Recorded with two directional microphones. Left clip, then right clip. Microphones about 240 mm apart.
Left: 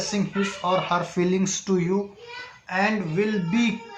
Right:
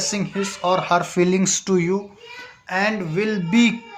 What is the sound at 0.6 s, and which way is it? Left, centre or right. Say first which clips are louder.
Speech: right 5 dB; right.